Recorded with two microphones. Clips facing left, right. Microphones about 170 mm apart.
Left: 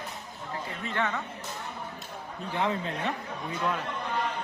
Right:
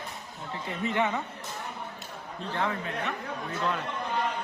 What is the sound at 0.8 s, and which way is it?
Speech, 15° right (ahead or behind).